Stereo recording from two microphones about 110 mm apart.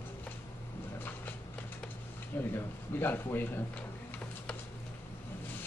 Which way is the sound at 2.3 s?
20° left (ahead or behind).